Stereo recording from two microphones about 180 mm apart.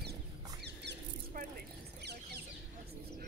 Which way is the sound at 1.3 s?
50° right (ahead or behind).